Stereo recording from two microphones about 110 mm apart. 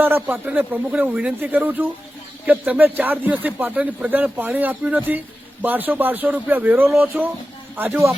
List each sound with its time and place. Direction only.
0.0 s a man's voice: 15° right (ahead or behind)